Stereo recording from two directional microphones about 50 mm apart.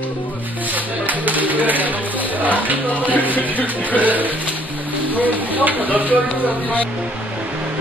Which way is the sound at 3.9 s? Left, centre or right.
Right.